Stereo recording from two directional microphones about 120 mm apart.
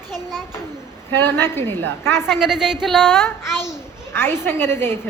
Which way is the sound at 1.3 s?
20° left (ahead or behind).